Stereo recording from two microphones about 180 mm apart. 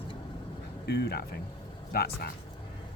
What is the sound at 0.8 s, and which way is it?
Speech, 65° left (ahead or behind).